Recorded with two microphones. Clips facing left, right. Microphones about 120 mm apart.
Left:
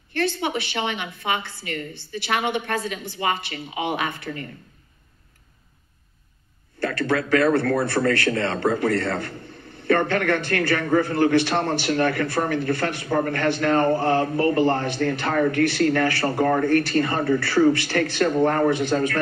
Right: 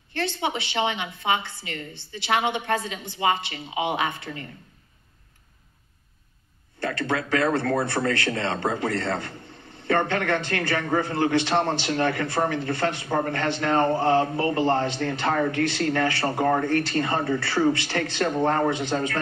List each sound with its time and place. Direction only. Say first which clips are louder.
0.1 s a man's voice: left 3 dB; 20° right (ahead or behind)
6.8 s a man's voice: left 3 dB; 20° right (ahead or behind)